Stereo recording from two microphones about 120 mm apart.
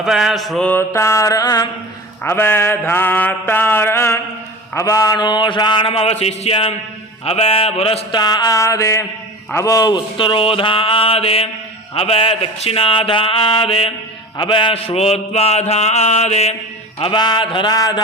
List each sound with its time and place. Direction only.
0.0 s mantra: 5° right (ahead or behind)
0.7 s a sound: 20° left (ahead or behind)
2.2 s mantra: 20° left (ahead or behind)
4.7 s a man's voice: 25° left (ahead or behind); by 6.7 s 55° left (ahead or behind)
7.3 s mantra: 55° left (ahead or behind)
8.1 s a sound: 35° left (ahead or behind)
14.3 s mantra: 40° left (ahead or behind); by 16.6 s 65° left (ahead or behind)
17.0 s a man's voice: 40° left (ahead or behind)